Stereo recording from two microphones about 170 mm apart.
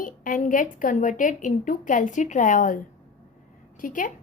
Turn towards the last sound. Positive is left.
turn(degrees=50)  # may be behind; listen again after turning